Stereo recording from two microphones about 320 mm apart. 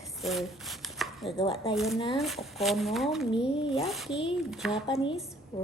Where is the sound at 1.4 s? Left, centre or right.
Centre.